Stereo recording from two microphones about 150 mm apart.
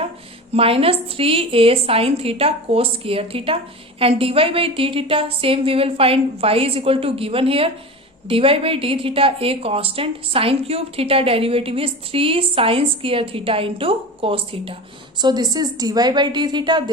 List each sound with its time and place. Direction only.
0.5 s a woman's voice: 40° right (ahead or behind)